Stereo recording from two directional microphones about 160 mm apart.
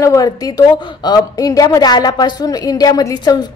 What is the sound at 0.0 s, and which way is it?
A woman's voice, 20° left (ahead or behind).